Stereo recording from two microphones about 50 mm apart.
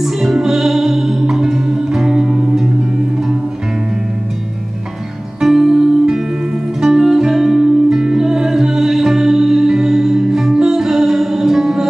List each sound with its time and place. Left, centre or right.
0.0 s music: centre
5.4 s music: centre